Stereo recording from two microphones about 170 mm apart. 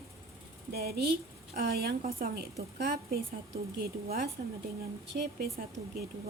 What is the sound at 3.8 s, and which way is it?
Speech, 65° right (ahead or behind).